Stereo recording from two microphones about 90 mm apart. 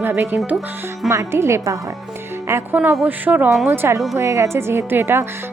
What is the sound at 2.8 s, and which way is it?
Speech, 10° right (ahead or behind).